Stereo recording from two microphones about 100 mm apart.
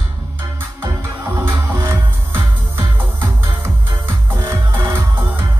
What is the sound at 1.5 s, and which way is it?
Music, 25° right (ahead or behind).